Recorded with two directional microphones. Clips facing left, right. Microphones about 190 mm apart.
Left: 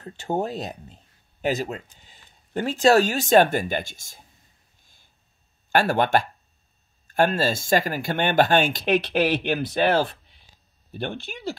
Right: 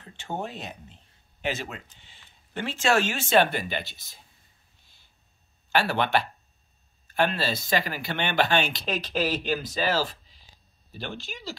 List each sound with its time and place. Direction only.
0.0 s speech: 40° left (ahead or behind)
5.7 s speech: 50° left (ahead or behind)